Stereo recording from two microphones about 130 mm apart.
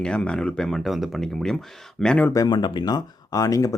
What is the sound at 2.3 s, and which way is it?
Speech, 30° left (ahead or behind).